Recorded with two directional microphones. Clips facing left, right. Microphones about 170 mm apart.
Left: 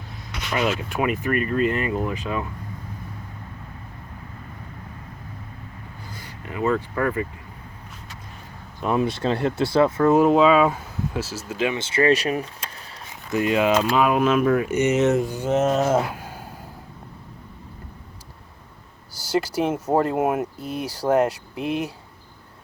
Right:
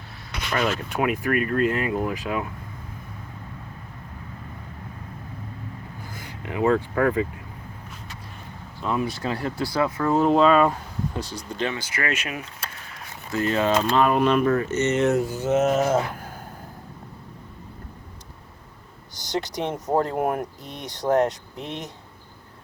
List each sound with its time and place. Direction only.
0.5 s speech: 5° left (ahead or behind)
6.2 s a sound: 15° right (ahead or behind)
7.0 s speech: 15° right (ahead or behind)
8.8 s speech: 20° left (ahead or behind)
10.2 s speech: 5° left (ahead or behind)
11.7 s speech: 25° left (ahead or behind)
13.3 s speech: 15° left (ahead or behind)
15.9 s a sound: 10° left (ahead or behind)
19.2 s speech: 5° left (ahead or behind)